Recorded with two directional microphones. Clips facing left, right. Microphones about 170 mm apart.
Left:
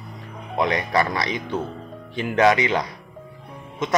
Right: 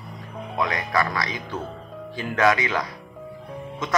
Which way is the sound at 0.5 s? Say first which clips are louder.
Left 3 dB; 25° left (ahead or behind).